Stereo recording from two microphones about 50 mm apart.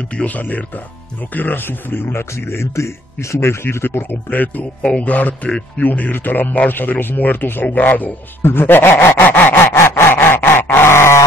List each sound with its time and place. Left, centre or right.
0.1 s a man's voice: left
4.3 s speech: left
8.4 s a man's voice: left
9.8 s a sound: left